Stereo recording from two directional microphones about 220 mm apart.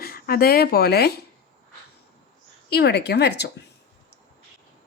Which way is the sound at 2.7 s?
50° left (ahead or behind).